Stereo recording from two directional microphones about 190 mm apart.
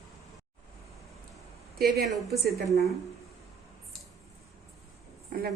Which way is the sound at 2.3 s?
55° right (ahead or behind).